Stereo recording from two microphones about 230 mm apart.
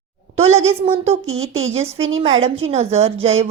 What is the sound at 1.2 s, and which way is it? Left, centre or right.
Speech, right.